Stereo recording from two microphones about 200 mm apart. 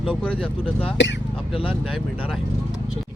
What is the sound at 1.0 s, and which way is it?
Speech, 60° left (ahead or behind).